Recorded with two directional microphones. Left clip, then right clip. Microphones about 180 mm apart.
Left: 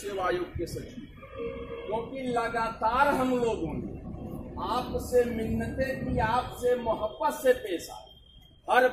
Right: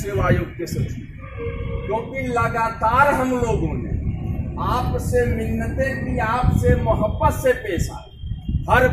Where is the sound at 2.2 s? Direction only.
10° right (ahead or behind).